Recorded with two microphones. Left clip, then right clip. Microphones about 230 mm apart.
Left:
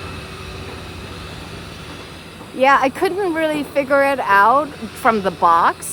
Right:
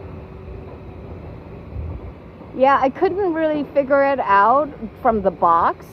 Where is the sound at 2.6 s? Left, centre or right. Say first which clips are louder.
Left 1 dB; centre.